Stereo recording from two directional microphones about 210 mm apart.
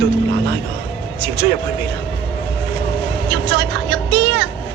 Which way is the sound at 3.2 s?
55° right (ahead or behind).